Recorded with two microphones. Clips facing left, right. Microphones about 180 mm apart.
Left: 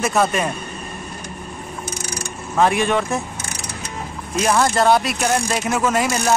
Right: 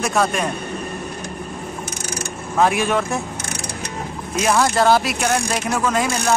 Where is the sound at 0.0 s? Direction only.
Centre (ahead or behind).